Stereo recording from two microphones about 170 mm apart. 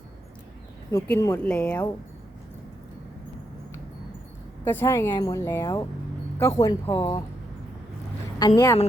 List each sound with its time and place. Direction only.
0.9 s speech: 15° left (ahead or behind)
4.6 s speech: 10° left (ahead or behind)
8.4 s speech: 25° left (ahead or behind)